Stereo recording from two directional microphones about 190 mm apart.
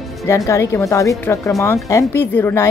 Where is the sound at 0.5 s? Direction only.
15° left (ahead or behind).